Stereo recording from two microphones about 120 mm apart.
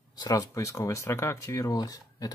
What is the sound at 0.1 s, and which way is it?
Speech, 30° left (ahead or behind).